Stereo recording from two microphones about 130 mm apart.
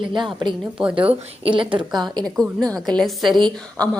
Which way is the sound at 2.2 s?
5° left (ahead or behind).